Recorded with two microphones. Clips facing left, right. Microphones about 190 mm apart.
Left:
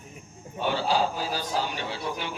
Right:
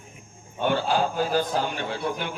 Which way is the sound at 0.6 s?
55° right (ahead or behind).